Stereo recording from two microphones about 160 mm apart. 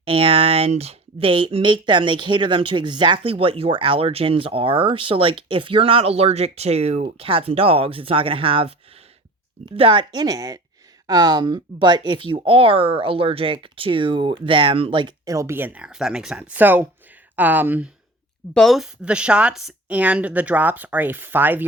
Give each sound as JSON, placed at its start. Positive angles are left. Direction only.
{"t": 0.0, "sound": "speech", "side_deg": -35}
{"t": 9.7, "sound": "speech", "side_deg": -35}
{"t": 18.5, "sound": "speech", "side_deg": 0}